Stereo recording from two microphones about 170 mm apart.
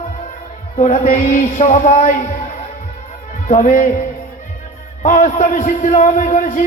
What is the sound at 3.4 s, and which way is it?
Music, 50° left (ahead or behind).